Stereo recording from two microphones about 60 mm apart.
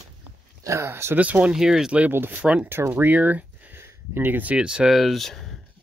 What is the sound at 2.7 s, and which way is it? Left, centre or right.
Speech, right.